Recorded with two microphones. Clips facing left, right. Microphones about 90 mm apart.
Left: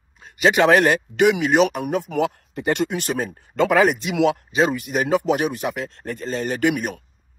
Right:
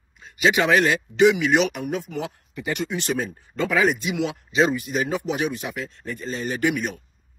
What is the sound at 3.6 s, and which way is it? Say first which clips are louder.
Speech: left 4 dB; 60° left (ahead or behind).